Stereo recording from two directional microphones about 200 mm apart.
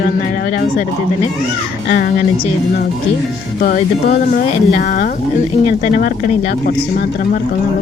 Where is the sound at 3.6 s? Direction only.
45° left (ahead or behind).